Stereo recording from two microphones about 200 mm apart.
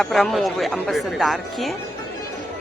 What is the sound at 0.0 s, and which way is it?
Speech, centre (ahead or behind).